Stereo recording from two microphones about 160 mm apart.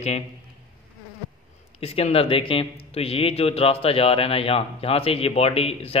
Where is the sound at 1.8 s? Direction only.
40° left (ahead or behind).